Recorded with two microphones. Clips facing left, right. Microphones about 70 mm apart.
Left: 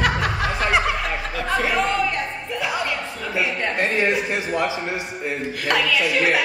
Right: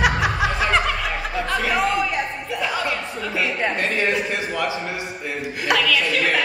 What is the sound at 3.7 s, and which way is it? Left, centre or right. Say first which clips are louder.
A man's voice: left 1 dB; left.